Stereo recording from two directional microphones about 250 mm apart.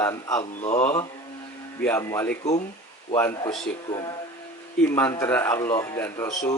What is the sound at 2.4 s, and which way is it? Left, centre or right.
Speech, left.